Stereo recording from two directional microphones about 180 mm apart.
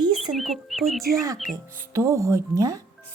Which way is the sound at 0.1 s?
Centre (ahead or behind).